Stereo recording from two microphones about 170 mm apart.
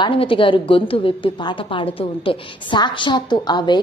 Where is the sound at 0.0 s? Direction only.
30° left (ahead or behind).